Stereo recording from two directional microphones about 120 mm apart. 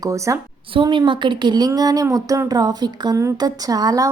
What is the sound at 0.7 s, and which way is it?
A woman's voice, 45° right (ahead or behind).